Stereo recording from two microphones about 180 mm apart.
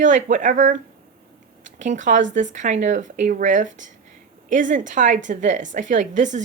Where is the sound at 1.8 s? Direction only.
45° right (ahead or behind).